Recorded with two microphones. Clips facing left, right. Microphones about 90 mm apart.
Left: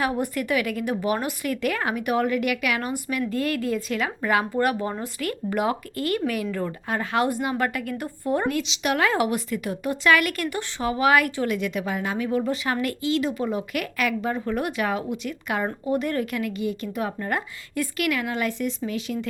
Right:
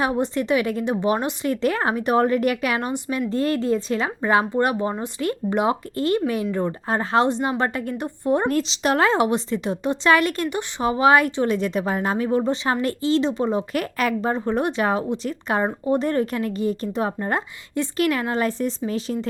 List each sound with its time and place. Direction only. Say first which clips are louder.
0.0 s a woman's voice: right 3 dB; 25° right (ahead or behind)
8.4 s speech: right 4 dB; 35° right (ahead or behind)